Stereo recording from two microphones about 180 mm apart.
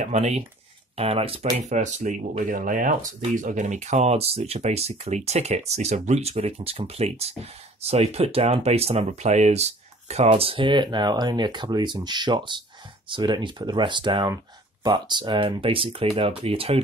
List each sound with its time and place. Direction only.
0.0 s speech: 40° right (ahead or behind)